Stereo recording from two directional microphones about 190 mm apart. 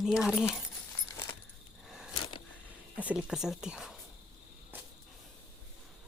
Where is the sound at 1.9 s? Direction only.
5° right (ahead or behind).